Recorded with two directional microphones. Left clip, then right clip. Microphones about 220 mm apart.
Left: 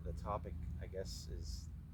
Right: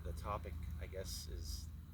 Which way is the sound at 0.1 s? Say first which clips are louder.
Left 1 dB; centre (ahead or behind).